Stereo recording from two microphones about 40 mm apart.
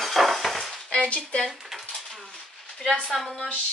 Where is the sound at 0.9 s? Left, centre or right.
Left.